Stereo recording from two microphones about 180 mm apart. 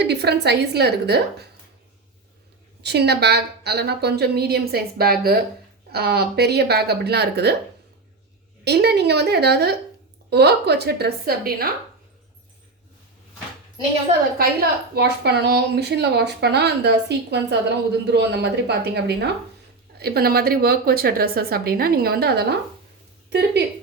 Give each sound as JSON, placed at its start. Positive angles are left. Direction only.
{"t": 0.0, "sound": "a woman's voice", "side_deg": -65}
{"t": 2.8, "sound": "a woman's voice", "side_deg": -65}
{"t": 8.6, "sound": "a woman's voice", "side_deg": -65}
{"t": 14.3, "sound": "a woman's voice", "side_deg": -60}